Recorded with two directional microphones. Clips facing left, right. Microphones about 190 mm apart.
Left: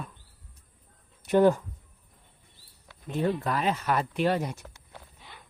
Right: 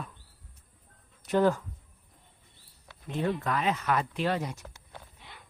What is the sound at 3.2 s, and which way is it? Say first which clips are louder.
Speech: left 2 dB; 35° left (ahead or behind).